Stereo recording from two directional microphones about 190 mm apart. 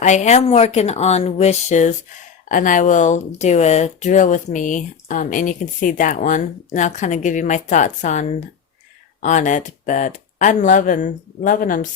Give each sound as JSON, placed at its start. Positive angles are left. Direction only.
{"t": 0.0, "sound": "speech", "side_deg": 40}